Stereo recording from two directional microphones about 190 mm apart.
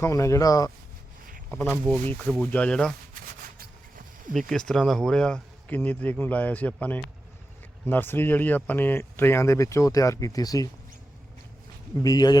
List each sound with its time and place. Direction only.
0.0 s speech: 15° left (ahead or behind)
4.4 s speech: 5° left (ahead or behind); by 10.7 s 20° left (ahead or behind)
12.0 s speech: 20° left (ahead or behind)